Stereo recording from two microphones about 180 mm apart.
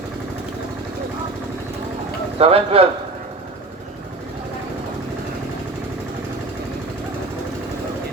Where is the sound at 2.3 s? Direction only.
35° right (ahead or behind).